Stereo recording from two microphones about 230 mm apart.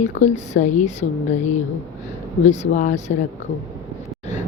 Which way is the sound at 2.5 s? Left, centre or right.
Left.